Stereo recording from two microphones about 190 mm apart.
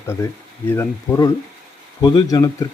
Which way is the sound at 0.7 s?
10° left (ahead or behind).